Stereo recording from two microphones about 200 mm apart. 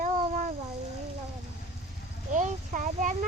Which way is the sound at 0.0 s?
40° right (ahead or behind).